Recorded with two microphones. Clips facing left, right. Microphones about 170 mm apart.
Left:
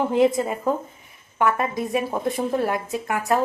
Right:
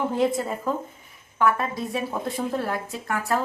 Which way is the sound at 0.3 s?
20° left (ahead or behind).